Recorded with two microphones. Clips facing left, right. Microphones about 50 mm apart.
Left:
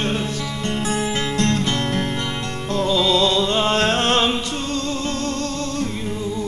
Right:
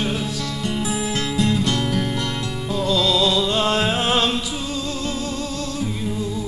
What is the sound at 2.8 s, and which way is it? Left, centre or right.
Music, centre.